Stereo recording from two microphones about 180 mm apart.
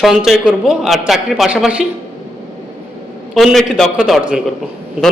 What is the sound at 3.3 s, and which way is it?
Speech, centre (ahead or behind).